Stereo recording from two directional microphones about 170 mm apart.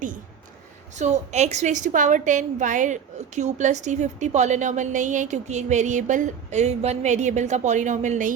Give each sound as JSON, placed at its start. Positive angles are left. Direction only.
{"t": 0.9, "sound": "a woman's voice", "side_deg": -40}